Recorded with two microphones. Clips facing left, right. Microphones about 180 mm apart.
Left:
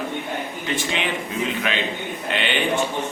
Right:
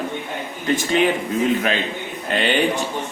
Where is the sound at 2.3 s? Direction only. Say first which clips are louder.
Right 4 dB; 40° right (ahead or behind).